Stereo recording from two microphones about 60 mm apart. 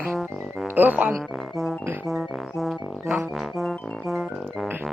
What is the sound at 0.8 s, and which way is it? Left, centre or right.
Speech, right.